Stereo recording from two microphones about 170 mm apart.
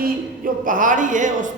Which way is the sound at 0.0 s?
55° right (ahead or behind).